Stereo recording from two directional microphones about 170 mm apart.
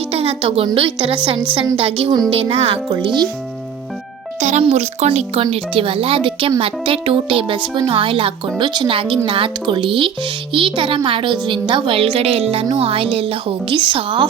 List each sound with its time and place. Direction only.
0.1 s speech: 35° right (ahead or behind)
4.4 s speech: 45° right (ahead or behind)